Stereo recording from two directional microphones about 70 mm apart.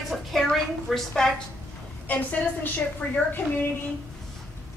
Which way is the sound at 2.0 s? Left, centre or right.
Left.